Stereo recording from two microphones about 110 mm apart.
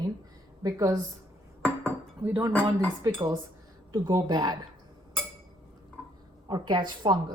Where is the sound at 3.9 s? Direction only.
40° right (ahead or behind).